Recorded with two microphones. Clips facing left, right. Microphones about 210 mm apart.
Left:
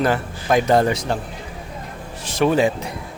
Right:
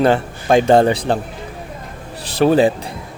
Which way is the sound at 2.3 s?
35° right (ahead or behind).